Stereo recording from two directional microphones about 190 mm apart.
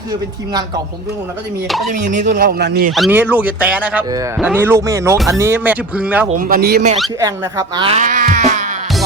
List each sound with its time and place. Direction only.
1.9 s speech: 40° right (ahead or behind)
2.3 s speech: 55° right (ahead or behind)
2.9 s speech: 5° right (ahead or behind)
6.4 s speech: 50° right (ahead or behind)
7.2 s speech: 15° right (ahead or behind)
7.9 s music: 40° right (ahead or behind)